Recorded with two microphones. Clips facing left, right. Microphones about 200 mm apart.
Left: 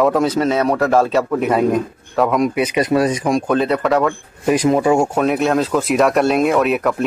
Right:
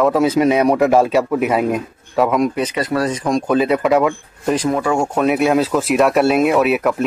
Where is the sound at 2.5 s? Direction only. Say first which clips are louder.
Left 3 dB; 15° left (ahead or behind).